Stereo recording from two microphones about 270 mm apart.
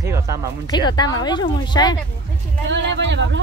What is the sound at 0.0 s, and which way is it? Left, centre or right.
Music, centre.